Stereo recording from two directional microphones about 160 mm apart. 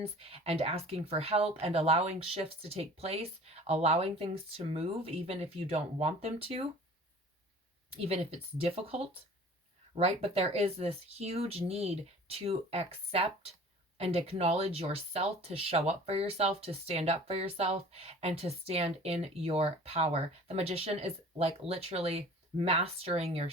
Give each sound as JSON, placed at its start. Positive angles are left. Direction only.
{"t": 0.0, "sound": "speech", "side_deg": -40}
{"t": 7.9, "sound": "speech", "side_deg": -40}